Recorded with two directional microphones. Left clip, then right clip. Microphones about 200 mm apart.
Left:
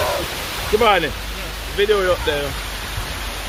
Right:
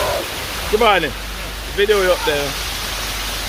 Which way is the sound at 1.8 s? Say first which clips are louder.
Right 2 dB; 15° right (ahead or behind).